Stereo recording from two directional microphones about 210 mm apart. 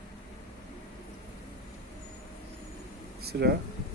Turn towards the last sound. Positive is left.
turn(degrees=-50)  # may be behind; listen again after turning